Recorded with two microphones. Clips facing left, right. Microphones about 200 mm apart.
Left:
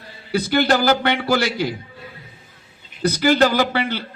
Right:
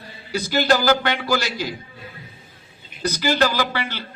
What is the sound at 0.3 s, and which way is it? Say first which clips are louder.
A man's voice: left 2 dB; 60° left (ahead or behind).